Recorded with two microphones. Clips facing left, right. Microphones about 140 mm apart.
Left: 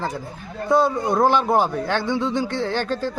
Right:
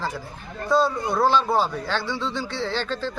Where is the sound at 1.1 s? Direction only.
45° left (ahead or behind).